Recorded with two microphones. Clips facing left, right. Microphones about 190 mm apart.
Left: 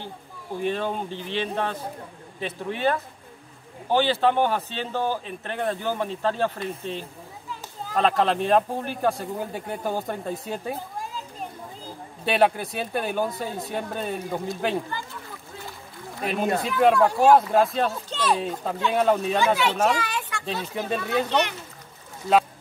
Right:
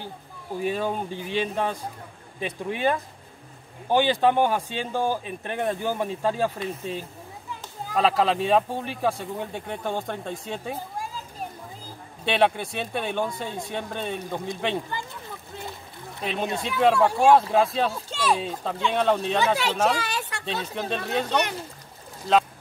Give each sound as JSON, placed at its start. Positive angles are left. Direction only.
{"t": 0.6, "sound": "speech", "side_deg": -10}
{"t": 12.3, "sound": "speech", "side_deg": 0}
{"t": 16.6, "sound": "speech", "side_deg": 0}
{"t": 18.1, "sound": "a sound", "side_deg": -10}
{"t": 18.4, "sound": "speech", "side_deg": 5}
{"t": 20.1, "sound": "a sound", "side_deg": -40}
{"t": 20.4, "sound": "speech", "side_deg": 5}